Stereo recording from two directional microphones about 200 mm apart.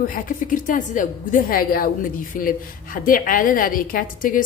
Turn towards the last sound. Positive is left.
turn(degrees=40)  # may be behind; listen again after turning